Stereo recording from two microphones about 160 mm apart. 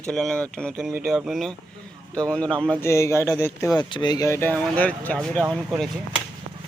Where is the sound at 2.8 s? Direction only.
15° left (ahead or behind).